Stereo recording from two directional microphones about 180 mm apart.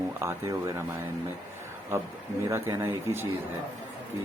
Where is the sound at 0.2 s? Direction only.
15° right (ahead or behind).